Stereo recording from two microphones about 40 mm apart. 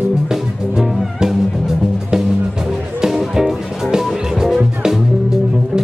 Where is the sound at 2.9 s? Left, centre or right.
Centre.